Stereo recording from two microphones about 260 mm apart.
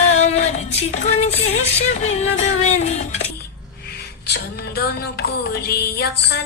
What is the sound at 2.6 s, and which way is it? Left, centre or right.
Music, left.